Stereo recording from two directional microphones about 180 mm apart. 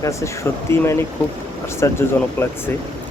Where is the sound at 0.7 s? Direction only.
15° left (ahead or behind).